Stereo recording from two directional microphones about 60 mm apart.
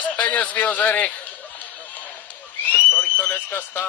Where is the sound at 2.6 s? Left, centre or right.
Left.